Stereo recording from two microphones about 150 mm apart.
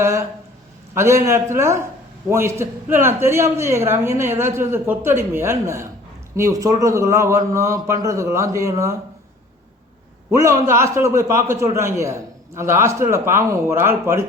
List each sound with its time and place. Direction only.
0.0 s a man's voice: 20° right (ahead or behind)
10.3 s a man's voice: 20° right (ahead or behind)